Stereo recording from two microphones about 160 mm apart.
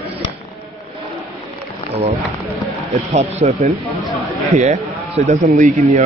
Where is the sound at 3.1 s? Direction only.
45° right (ahead or behind).